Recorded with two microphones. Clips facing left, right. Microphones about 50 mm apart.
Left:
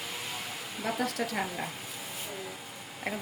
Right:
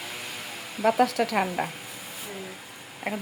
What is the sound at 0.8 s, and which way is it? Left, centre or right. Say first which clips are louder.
Speech: right 10 dB; right.